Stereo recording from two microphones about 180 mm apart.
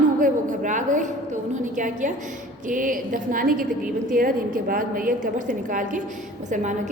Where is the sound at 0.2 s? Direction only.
45° right (ahead or behind).